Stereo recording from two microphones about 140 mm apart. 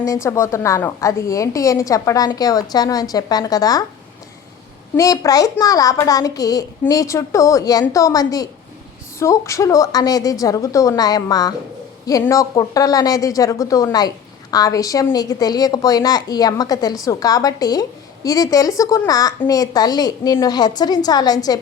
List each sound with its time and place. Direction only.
0.0 s a woman's voice: 20° left (ahead or behind)
4.9 s a woman's voice: 25° left (ahead or behind)